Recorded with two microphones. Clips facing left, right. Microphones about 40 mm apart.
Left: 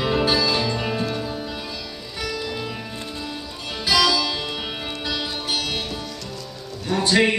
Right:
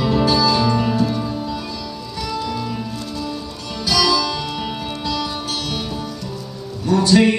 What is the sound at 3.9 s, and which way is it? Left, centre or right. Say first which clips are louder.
Music: right 2 dB; centre.